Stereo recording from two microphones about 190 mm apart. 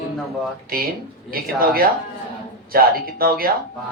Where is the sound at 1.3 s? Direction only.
50° right (ahead or behind).